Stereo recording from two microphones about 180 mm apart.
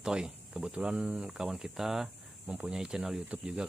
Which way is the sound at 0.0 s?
5° right (ahead or behind).